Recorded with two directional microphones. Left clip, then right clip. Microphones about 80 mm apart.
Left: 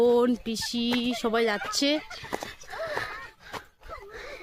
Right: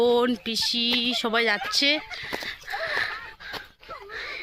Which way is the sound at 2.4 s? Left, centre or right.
Left.